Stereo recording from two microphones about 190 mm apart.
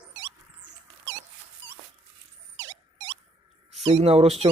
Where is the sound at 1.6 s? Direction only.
70° right (ahead or behind).